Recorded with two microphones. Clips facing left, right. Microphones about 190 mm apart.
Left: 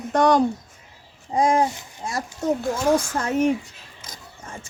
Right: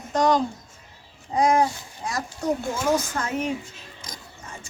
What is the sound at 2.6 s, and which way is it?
Speech, centre (ahead or behind).